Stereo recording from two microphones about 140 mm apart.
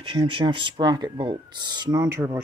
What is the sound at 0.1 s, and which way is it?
Speech, 35° right (ahead or behind).